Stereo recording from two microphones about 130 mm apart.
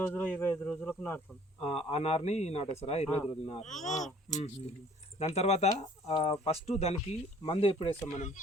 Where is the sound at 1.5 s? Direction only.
50° left (ahead or behind).